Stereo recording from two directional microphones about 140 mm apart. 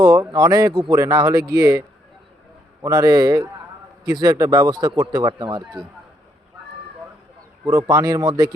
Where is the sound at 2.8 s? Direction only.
25° right (ahead or behind).